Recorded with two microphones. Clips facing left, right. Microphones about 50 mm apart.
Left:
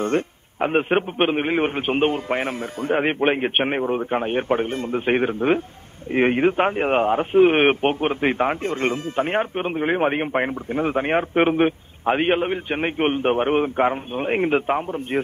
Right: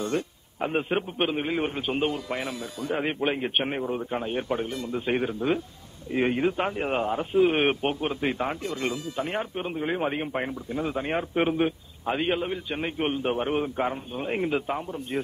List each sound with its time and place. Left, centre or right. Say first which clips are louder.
0.0 s a man's voice: left 6 dB; left